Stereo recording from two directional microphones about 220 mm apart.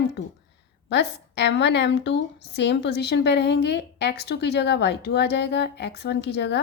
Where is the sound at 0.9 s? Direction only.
50° left (ahead or behind).